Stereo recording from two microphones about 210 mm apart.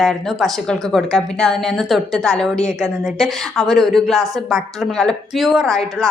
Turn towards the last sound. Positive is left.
turn(degrees=0)  # may be behind; listen again after turning